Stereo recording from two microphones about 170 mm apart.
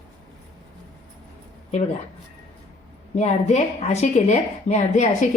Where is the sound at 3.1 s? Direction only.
40° left (ahead or behind).